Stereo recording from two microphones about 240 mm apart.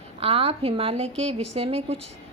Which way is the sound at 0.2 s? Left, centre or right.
Right.